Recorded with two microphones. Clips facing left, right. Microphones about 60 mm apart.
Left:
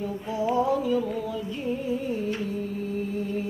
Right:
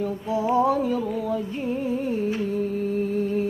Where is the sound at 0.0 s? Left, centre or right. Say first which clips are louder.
Right 3 dB; right.